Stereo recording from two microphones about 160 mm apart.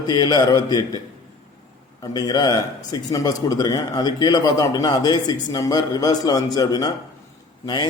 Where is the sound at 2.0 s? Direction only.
25° left (ahead or behind).